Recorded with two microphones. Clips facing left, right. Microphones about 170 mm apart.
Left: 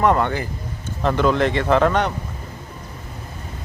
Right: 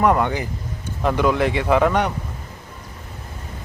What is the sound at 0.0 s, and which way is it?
A man's voice, 10° right (ahead or behind).